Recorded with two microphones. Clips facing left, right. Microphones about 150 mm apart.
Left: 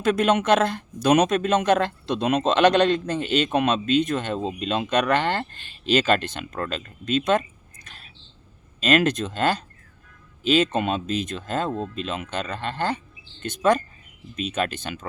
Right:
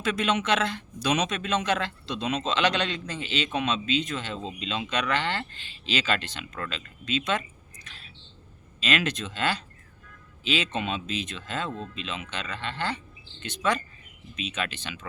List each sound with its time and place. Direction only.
0.0 s speech: 50° left (ahead or behind)
7.9 s a sound: 50° left (ahead or behind)
8.8 s speech: 45° left (ahead or behind)